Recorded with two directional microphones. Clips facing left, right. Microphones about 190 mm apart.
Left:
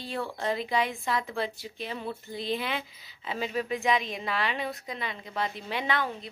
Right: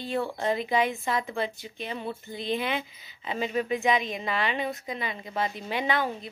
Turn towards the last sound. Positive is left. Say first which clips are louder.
# right 2 dB
turn(degrees=0)  # may be behind; listen again after turning